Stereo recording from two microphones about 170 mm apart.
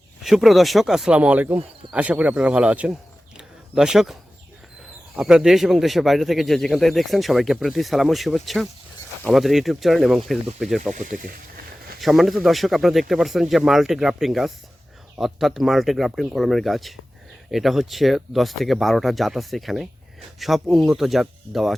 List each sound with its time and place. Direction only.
0.2 s speech: centre (ahead or behind)
3.3 s a sound: 5° right (ahead or behind)
5.1 s speech: 5° right (ahead or behind)
10.9 s speech: 50° right (ahead or behind)
11.9 s speech: centre (ahead or behind)